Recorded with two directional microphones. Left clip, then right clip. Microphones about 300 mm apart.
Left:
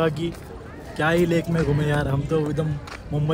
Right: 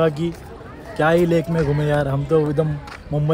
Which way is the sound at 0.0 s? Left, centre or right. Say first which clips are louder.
Right 4 dB; centre.